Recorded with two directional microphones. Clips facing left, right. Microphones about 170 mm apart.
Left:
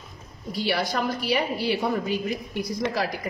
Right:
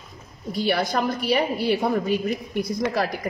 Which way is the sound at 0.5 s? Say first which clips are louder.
Right 3 dB; 55° right (ahead or behind).